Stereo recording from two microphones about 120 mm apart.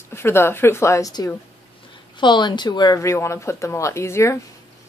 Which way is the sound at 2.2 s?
40° left (ahead or behind).